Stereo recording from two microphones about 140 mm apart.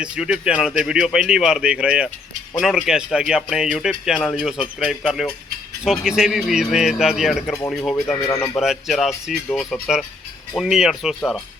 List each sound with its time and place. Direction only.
0.0 s speech: 5° right (ahead or behind)
8.0 s speech: 15° left (ahead or behind)
8.5 s speech: 5° right (ahead or behind)